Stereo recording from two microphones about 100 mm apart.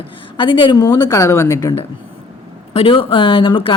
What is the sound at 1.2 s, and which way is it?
Speech, 30° left (ahead or behind).